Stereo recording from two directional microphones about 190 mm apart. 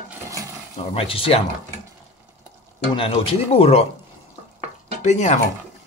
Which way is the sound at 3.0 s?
30° left (ahead or behind).